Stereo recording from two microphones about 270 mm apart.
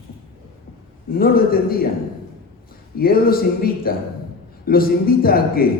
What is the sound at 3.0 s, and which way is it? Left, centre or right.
A man's voice, left.